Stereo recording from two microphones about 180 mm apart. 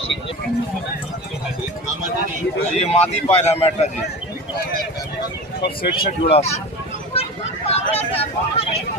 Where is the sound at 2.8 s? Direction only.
35° left (ahead or behind).